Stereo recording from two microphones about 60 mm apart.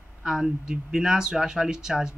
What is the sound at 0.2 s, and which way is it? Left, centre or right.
Speech, centre.